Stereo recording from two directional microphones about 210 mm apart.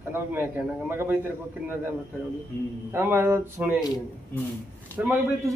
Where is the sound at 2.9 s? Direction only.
10° right (ahead or behind).